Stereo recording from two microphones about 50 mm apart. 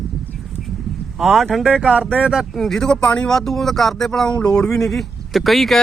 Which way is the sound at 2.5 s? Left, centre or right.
Centre.